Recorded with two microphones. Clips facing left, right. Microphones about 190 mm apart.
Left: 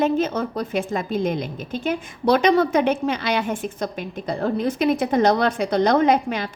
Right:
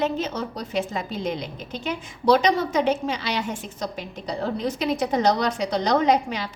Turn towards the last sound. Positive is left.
turn(degrees=50)  # may be behind; listen again after turning